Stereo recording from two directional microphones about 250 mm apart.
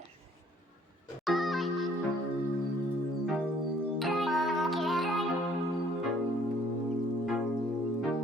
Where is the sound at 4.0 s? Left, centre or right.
Centre.